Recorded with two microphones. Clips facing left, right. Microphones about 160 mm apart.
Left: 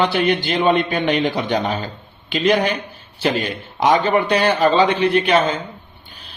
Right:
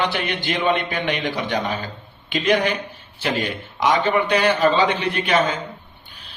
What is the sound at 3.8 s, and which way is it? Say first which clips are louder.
Speech: left 3 dB; 35° left (ahead or behind).